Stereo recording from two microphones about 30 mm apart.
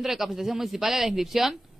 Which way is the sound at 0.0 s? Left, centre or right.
Centre.